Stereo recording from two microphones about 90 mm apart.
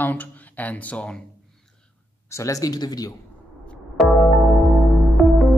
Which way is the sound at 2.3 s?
35° left (ahead or behind).